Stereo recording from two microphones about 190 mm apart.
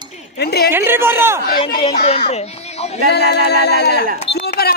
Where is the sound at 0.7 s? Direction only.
10° right (ahead or behind).